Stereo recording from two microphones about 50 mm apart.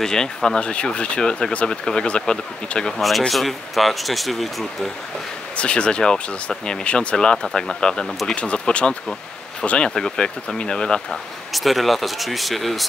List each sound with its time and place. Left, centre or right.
0.0 s speech: centre
3.0 s speech: centre
5.6 s speech: left
11.5 s speech: centre